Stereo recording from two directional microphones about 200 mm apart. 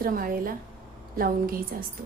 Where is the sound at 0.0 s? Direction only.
45° right (ahead or behind).